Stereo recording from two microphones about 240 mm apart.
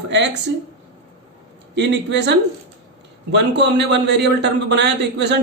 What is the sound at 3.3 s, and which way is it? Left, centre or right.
A man's voice, right.